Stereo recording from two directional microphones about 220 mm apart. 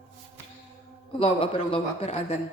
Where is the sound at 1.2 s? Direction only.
25° left (ahead or behind).